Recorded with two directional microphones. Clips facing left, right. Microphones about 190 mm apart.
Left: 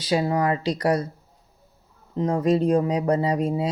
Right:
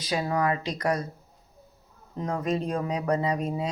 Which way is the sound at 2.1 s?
30° left (ahead or behind).